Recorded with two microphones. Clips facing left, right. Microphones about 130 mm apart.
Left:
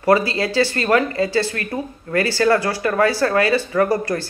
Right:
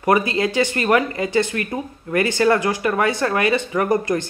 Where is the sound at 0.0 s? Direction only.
20° right (ahead or behind).